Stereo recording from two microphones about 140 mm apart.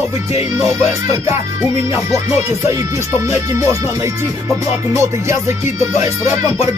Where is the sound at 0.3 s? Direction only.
20° right (ahead or behind).